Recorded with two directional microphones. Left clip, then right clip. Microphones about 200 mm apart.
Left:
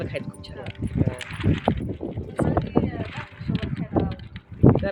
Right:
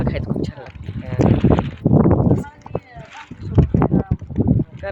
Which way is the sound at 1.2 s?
10° left (ahead or behind).